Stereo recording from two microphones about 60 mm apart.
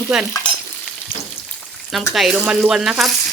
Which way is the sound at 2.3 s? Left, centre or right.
Centre.